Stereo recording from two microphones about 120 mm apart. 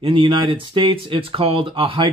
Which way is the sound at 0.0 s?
50° right (ahead or behind).